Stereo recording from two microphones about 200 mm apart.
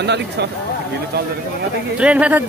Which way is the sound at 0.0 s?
55° right (ahead or behind).